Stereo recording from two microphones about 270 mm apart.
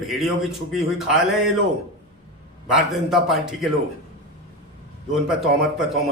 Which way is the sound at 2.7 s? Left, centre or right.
Centre.